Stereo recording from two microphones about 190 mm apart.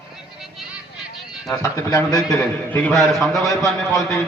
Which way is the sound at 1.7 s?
15° left (ahead or behind).